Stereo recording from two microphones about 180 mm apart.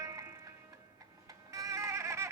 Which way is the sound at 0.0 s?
15° right (ahead or behind).